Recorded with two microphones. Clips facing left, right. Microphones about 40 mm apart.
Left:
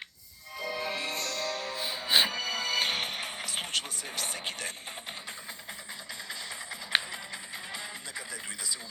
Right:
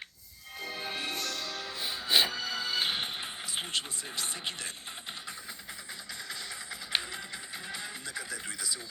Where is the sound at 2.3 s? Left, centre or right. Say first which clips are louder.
Left 2 dB; left.